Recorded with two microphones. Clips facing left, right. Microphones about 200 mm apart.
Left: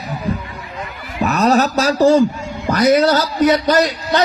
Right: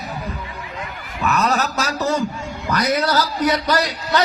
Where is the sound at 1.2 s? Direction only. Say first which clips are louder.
Left 6 dB; 35° left (ahead or behind).